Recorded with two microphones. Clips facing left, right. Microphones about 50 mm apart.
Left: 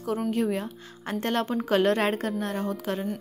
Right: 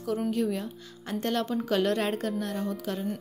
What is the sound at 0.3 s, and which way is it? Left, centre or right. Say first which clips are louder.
Speech: left 2 dB; left.